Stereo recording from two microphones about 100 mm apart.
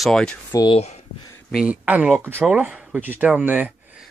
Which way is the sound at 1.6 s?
15° right (ahead or behind).